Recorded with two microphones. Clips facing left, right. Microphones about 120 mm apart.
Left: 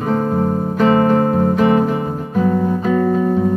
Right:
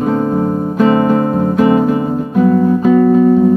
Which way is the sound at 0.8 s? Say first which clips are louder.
Right 2 dB; 10° right (ahead or behind).